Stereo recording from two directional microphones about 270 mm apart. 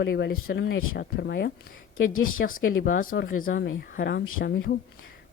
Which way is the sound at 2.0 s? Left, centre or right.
Left.